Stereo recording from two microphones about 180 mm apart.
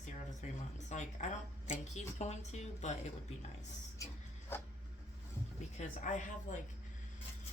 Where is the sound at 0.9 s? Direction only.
40° left (ahead or behind).